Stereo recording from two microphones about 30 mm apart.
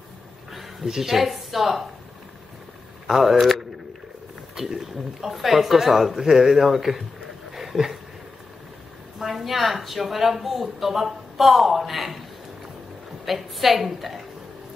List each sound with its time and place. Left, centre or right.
0.5 s a sound: centre
0.8 s speech: centre
3.1 s speech: centre
4.6 s speech: centre
5.3 s speech: centre
7.5 s a sound: centre
9.2 s a woman's voice: centre
13.2 s a woman's voice: centre